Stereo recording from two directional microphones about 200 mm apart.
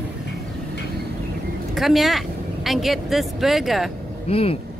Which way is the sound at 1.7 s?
Centre (ahead or behind).